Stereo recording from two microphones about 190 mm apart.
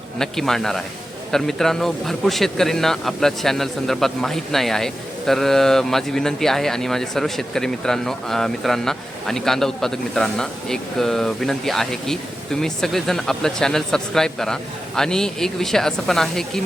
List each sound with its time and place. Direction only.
0.2 s speech: centre (ahead or behind)